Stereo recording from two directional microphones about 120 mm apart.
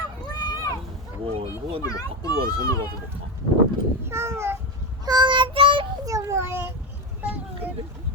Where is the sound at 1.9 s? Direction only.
30° left (ahead or behind).